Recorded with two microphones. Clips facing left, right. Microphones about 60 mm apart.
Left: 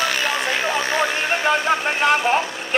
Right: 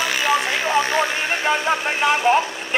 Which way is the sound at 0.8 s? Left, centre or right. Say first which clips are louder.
Even; left.